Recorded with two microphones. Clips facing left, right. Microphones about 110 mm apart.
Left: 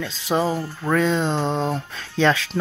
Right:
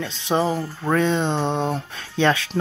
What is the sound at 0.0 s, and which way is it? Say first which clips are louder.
Speech: even; 25° right (ahead or behind).